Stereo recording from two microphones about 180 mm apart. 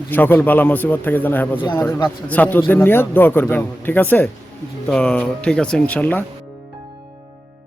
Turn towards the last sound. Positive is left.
turn(degrees=10)  # may be behind; listen again after turning